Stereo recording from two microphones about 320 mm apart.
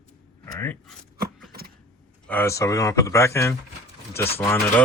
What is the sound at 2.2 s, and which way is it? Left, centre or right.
Speech, centre.